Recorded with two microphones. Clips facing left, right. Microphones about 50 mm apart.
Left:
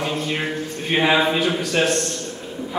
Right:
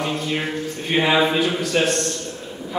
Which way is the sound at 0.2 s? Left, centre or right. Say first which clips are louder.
Even; centre.